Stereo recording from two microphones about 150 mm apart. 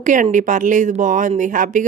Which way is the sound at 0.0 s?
55° right (ahead or behind).